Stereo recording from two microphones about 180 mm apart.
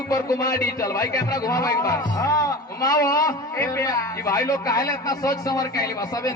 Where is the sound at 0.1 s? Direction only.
20° left (ahead or behind).